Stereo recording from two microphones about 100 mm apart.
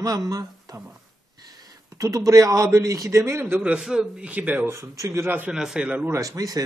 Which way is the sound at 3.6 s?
10° right (ahead or behind).